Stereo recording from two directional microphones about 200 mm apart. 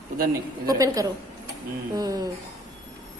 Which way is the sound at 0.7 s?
20° right (ahead or behind).